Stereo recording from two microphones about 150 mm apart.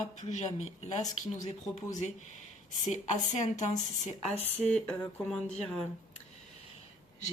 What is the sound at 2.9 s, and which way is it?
Speech, 50° left (ahead or behind).